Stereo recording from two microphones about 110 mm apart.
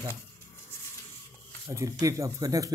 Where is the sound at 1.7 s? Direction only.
30° right (ahead or behind).